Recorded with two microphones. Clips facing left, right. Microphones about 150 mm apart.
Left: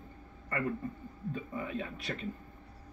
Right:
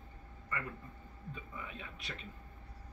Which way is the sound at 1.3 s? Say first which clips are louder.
Left 10 dB; 45° left (ahead or behind).